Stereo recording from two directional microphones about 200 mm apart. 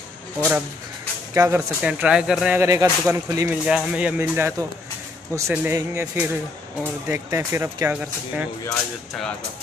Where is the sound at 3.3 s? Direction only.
15° right (ahead or behind).